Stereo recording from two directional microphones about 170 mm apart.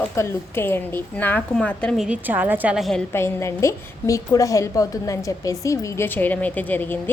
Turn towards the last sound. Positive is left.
turn(degrees=10)  # may be behind; listen again after turning